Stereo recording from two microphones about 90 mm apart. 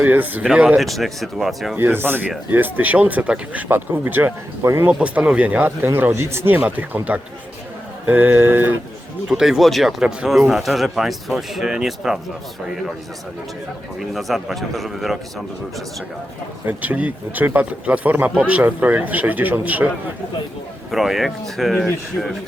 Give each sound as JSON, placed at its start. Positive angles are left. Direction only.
{"t": 0.0, "sound": "speech", "side_deg": -20}
{"t": 0.8, "sound": "speech", "side_deg": 0}
{"t": 1.7, "sound": "speech", "side_deg": -25}
{"t": 4.9, "sound": "speech", "side_deg": -15}
{"t": 9.3, "sound": "speech", "side_deg": -5}
{"t": 14.0, "sound": "speech", "side_deg": 0}
{"t": 16.6, "sound": "speech", "side_deg": -15}
{"t": 20.9, "sound": "speech", "side_deg": 0}